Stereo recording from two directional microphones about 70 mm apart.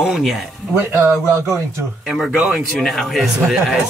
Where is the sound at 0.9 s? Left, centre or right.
Right.